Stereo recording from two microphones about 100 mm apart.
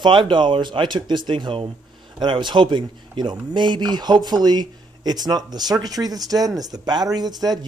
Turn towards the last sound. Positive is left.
turn(degrees=-40)  # may be behind; listen again after turning